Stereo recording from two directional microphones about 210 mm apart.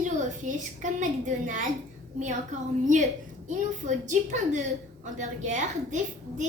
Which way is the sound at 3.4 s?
35° right (ahead or behind).